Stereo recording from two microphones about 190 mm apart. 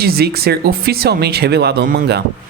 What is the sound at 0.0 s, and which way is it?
Speech, 55° right (ahead or behind).